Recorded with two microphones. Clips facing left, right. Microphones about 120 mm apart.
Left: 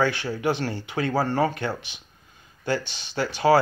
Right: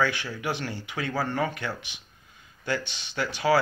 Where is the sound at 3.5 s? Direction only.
40° left (ahead or behind).